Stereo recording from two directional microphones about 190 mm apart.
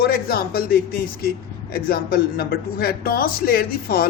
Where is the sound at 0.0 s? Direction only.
55° left (ahead or behind).